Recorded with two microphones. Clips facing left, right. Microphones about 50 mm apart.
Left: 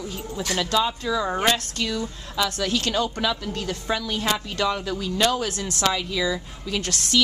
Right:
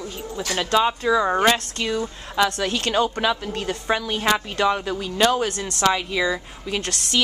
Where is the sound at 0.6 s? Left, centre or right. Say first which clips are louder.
Right 6 dB; right.